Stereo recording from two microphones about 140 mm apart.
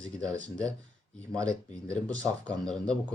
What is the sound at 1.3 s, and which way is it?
Speech, 25° right (ahead or behind).